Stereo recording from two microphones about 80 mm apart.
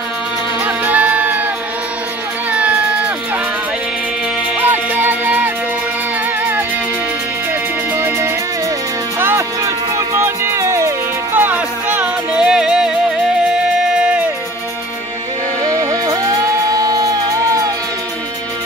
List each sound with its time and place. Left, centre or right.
0.7 s music: centre
2.5 s a sound: centre
4.6 s music: right
7.9 s music: right
9.6 s music: right
11.3 s music: right
12.4 s music: centre
15.6 s music: right